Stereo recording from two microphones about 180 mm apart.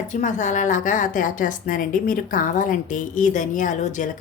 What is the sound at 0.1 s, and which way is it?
A woman's voice, 45° left (ahead or behind).